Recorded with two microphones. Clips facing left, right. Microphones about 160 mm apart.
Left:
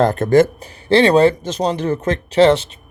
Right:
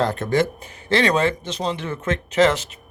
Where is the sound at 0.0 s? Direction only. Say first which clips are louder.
Left 7 dB; 50° left (ahead or behind).